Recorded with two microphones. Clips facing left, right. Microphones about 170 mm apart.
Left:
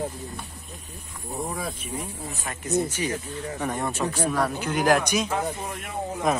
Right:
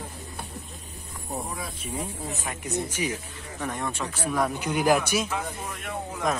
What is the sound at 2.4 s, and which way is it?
Speech, 10° right (ahead or behind).